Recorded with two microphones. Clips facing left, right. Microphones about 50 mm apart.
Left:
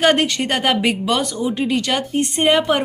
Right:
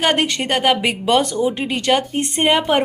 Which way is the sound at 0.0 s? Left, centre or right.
Centre.